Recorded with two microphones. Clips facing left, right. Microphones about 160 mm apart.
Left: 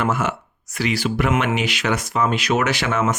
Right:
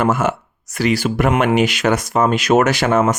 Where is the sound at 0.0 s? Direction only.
45° right (ahead or behind).